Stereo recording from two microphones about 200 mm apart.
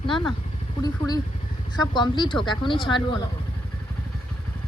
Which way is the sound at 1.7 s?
20° left (ahead or behind).